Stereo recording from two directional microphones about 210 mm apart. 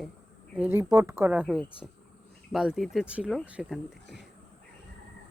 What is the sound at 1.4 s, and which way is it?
Speech, 5° left (ahead or behind).